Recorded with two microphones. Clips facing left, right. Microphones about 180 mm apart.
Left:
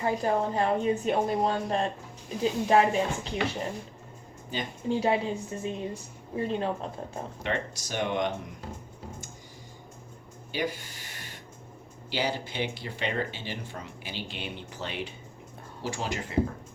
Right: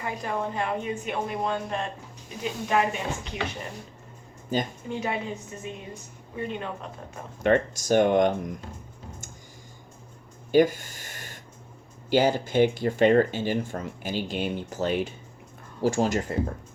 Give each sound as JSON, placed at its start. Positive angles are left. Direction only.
{"t": 0.0, "sound": "speech", "side_deg": 30}
{"t": 4.5, "sound": "speech", "side_deg": -45}
{"t": 4.9, "sound": "speech", "side_deg": 30}
{"t": 7.4, "sound": "speech", "side_deg": -50}
{"t": 10.5, "sound": "a sound", "side_deg": -45}
{"t": 12.1, "sound": "speech", "side_deg": -45}